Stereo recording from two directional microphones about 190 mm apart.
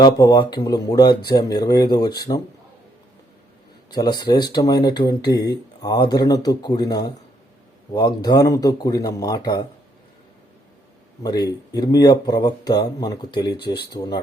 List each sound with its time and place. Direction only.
0.0 s speech: 20° left (ahead or behind)
3.9 s speech: 25° left (ahead or behind)
11.2 s speech: 20° left (ahead or behind)